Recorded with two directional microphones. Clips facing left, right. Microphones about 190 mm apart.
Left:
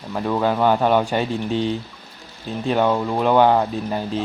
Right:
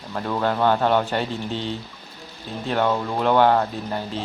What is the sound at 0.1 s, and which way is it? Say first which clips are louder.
Speech: left 3 dB; 10° left (ahead or behind).